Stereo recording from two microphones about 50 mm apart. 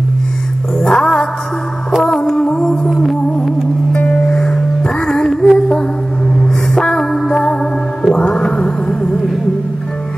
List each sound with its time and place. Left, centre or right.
0.7 s music: centre
4.1 s music: centre
6.7 s music: centre
8.1 s music: centre